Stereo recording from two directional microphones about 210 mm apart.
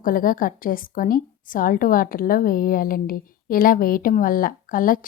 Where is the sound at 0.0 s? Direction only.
40° left (ahead or behind).